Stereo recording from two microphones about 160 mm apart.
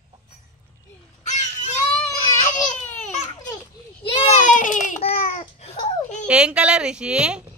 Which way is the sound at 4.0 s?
35° left (ahead or behind).